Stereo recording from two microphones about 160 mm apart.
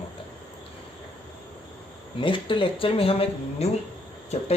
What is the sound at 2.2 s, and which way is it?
Speech, 30° left (ahead or behind).